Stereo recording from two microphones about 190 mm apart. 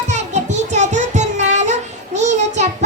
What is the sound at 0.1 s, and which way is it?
Music, 40° right (ahead or behind).